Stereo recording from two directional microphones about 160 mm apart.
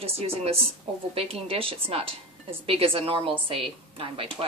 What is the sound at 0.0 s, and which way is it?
Speech, 40° right (ahead or behind).